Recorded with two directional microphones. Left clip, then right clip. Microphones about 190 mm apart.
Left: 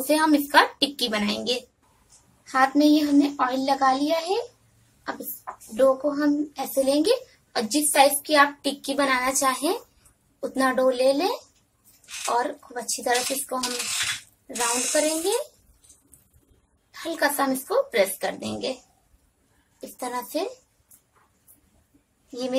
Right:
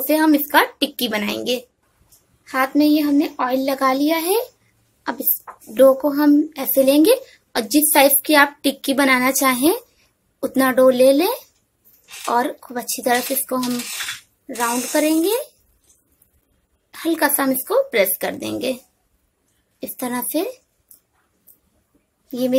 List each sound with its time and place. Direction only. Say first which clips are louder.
0.0 s a woman's voice: right 4 dB; 25° right (ahead or behind)
5.8 s speech: right 7 dB; 45° right (ahead or behind)
14.9 s speech: right 7 dB; 40° right (ahead or behind)
16.9 s speech: right 5 dB; 40° right (ahead or behind)
20.0 s speech: right 5 dB; 40° right (ahead or behind)
22.3 s speech: right 8 dB; 40° right (ahead or behind)